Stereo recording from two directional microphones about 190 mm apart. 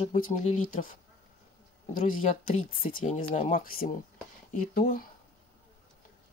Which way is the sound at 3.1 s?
30° left (ahead or behind).